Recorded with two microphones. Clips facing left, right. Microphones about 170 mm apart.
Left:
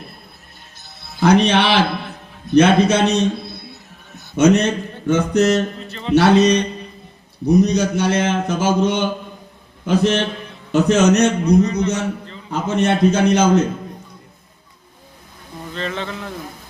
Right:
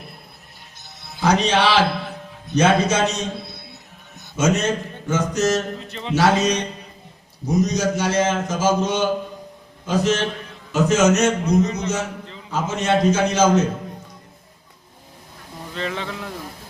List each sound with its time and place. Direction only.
1.2 s a man's voice: 60° left (ahead or behind)
4.4 s a man's voice: 65° left (ahead or behind)
5.9 s speech: 15° right (ahead or behind)
6.1 s a man's voice: 65° left (ahead or behind)
15.7 s speech: 10° right (ahead or behind)